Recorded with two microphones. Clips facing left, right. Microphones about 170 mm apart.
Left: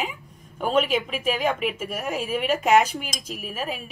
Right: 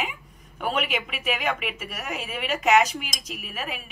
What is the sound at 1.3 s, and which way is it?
Speech, 35° left (ahead or behind).